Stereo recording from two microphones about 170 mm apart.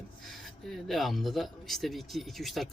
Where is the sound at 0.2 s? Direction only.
Centre (ahead or behind).